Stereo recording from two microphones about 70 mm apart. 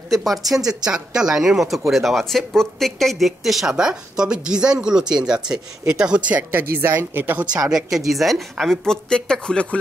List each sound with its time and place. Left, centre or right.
0.1 s speech: centre
6.5 s speech: right
7.7 s a woman's voice: centre